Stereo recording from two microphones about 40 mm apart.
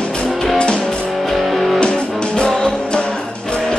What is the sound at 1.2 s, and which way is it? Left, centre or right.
Music, centre.